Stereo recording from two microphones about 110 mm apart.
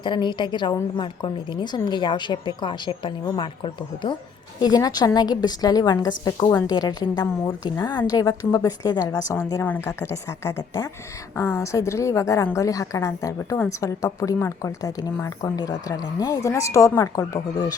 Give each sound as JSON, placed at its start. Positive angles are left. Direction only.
{"t": 0.0, "sound": "a woman's voice", "side_deg": 45}
{"t": 4.6, "sound": "a woman's voice", "side_deg": 35}